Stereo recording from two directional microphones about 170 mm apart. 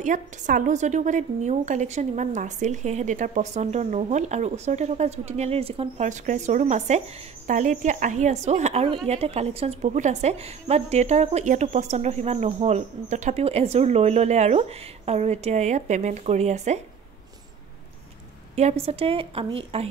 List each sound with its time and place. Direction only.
0.0 s a woman's voice: 50° right (ahead or behind)
18.6 s speech: 40° right (ahead or behind)